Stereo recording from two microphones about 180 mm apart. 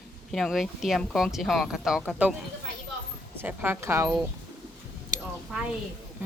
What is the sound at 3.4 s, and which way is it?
Speech, 10° right (ahead or behind).